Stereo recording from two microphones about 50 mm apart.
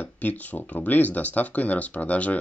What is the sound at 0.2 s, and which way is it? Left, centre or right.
Speech, left.